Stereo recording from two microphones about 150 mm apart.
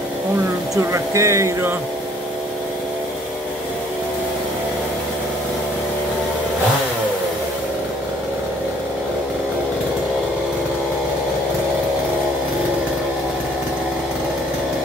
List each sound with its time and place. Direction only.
0.9 s speech: 20° right (ahead or behind)